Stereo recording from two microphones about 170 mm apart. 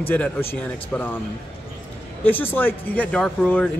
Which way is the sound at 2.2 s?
10° left (ahead or behind).